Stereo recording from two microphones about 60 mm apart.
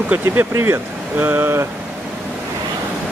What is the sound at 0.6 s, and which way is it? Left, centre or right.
Speech, right.